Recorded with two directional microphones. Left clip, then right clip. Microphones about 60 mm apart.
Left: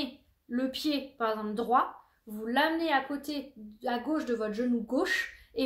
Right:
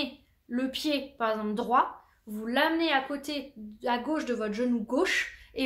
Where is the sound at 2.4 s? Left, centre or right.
Right.